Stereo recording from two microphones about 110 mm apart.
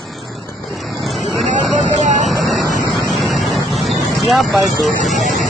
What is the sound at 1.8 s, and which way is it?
Hubbub, 90° right.